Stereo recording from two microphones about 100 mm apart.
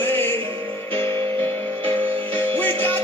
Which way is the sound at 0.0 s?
20° left (ahead or behind).